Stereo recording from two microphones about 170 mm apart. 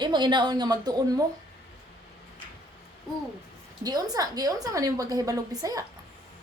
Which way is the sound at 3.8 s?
25° right (ahead or behind).